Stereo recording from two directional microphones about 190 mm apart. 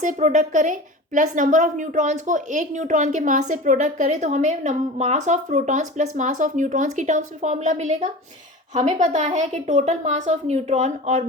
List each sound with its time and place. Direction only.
0.0 s a woman's voice: 40° right (ahead or behind)